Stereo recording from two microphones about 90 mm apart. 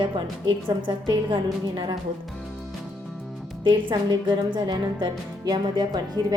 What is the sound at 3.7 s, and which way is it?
A woman's voice, 60° right (ahead or behind).